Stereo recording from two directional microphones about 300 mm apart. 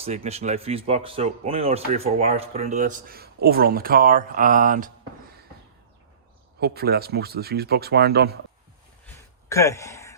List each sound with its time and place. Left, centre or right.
0.0 s speech: right
6.6 s speech: right
9.0 s a sound: centre